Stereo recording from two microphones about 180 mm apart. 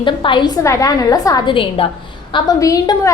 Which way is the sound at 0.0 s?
25° left (ahead or behind).